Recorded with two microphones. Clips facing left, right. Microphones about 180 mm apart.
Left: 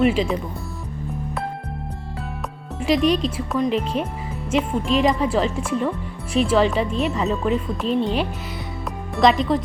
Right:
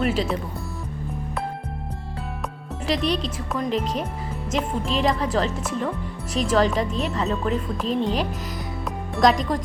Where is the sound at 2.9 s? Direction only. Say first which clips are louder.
Left 7 dB; 35° right (ahead or behind).